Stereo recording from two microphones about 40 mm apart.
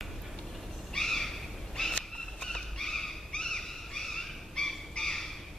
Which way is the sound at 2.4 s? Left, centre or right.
Centre.